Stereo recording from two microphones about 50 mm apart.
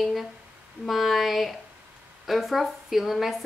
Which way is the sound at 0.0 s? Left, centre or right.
Centre.